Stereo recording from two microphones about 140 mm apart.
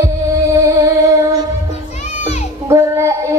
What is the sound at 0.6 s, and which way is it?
Music, 20° right (ahead or behind).